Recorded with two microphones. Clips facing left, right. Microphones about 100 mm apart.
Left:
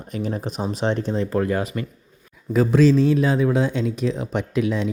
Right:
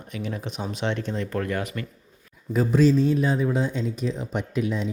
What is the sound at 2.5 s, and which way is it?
Speech, 90° left.